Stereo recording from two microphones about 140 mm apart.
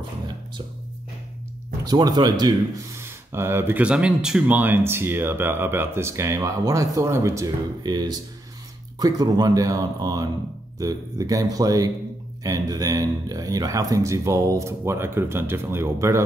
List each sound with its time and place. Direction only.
1.9 s speech: 30° right (ahead or behind)